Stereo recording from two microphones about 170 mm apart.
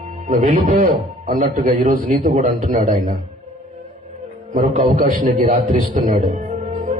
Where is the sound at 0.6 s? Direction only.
50° right (ahead or behind).